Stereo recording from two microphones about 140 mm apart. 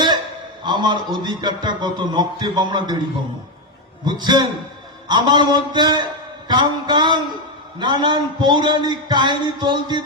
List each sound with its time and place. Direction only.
0.6 s a man's voice: 30° right (ahead or behind)
4.0 s a man's voice: 30° right (ahead or behind)